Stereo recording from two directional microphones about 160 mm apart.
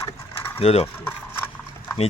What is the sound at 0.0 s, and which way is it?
Mechanisms, 15° left (ahead or behind).